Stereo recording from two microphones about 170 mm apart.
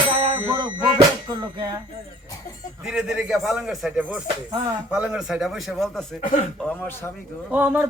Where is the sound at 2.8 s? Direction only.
5° right (ahead or behind).